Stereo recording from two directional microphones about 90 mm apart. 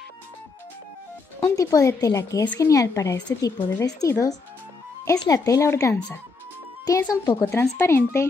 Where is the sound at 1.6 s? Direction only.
40° left (ahead or behind).